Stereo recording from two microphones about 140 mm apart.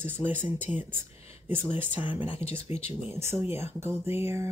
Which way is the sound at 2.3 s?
45° left (ahead or behind).